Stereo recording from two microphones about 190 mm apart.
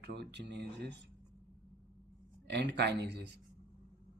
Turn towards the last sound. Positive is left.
turn(degrees=-60)  # may be behind; listen again after turning